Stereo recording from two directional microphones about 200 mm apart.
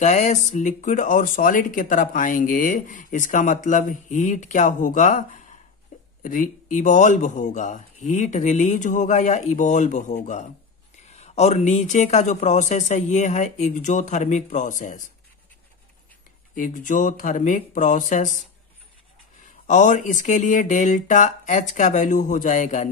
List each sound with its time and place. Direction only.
0.0 s speech: 35° left (ahead or behind)
5.9 s a sound: 35° left (ahead or behind)
6.2 s speech: 40° left (ahead or behind)
16.5 s speech: 40° left (ahead or behind)
19.4 s speech: 40° left (ahead or behind)